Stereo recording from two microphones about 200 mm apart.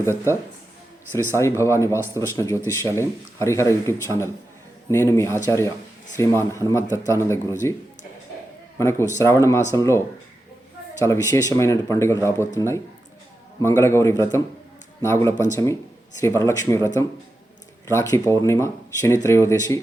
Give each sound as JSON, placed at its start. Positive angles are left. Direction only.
{"t": 0.0, "sound": "speech", "side_deg": 15}
{"t": 1.4, "sound": "speech", "side_deg": 15}
{"t": 8.8, "sound": "speech", "side_deg": 15}
{"t": 11.0, "sound": "speech", "side_deg": 15}